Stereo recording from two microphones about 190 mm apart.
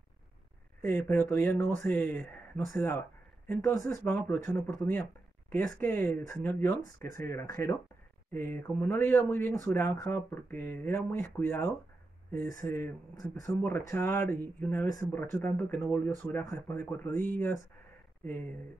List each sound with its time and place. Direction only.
0.8 s speech: 10° left (ahead or behind)